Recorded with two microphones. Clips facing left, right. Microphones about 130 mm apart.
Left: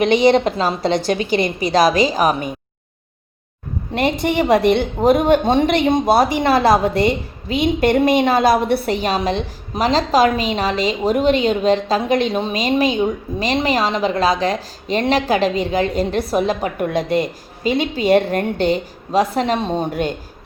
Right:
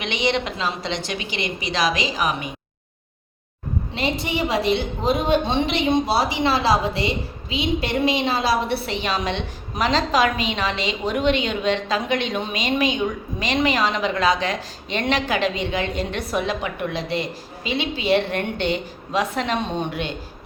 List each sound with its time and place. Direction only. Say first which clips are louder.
0.0 s a woman's voice: left 10 dB; 40° left (ahead or behind)
3.9 s a woman's voice: left 8 dB; 55° left (ahead or behind)